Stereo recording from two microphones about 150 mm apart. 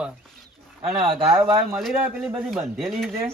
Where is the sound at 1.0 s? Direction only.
35° right (ahead or behind).